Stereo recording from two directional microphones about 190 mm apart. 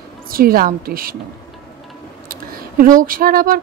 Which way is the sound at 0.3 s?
50° right (ahead or behind).